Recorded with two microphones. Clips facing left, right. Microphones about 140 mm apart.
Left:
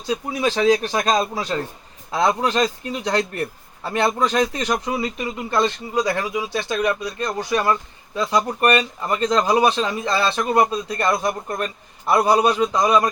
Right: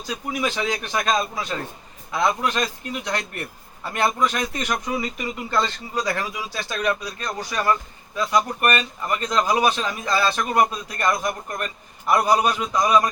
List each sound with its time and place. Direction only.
0.1 s speech: 30° left (ahead or behind)
5.5 s speech: 20° left (ahead or behind)